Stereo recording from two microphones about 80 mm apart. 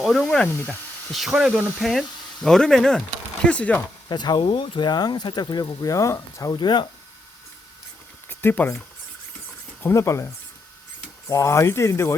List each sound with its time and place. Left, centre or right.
0.0 s speech: centre
3.4 s chopping: centre
4.1 s speech: left
5.9 s speech: left
6.5 s speech: left
8.3 s a sound: left
9.8 s speech: left
11.3 s speech: left